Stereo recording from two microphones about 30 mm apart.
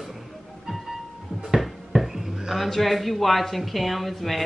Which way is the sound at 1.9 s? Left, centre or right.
Centre.